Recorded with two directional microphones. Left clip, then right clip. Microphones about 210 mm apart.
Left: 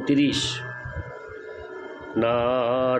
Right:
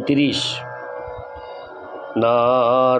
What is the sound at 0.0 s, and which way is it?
Mantra, 20° right (ahead or behind).